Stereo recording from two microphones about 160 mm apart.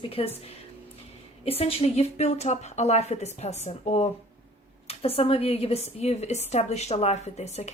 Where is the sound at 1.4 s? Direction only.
35° left (ahead or behind).